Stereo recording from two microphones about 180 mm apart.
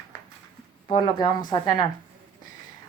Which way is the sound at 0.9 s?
25° left (ahead or behind).